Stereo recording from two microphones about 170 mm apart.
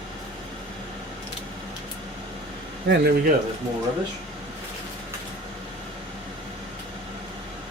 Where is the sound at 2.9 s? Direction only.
75° right (ahead or behind).